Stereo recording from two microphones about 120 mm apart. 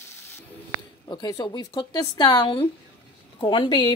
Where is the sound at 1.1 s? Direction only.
30° left (ahead or behind).